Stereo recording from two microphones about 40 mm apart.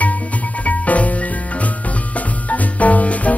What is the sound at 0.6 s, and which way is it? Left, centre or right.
Music, left.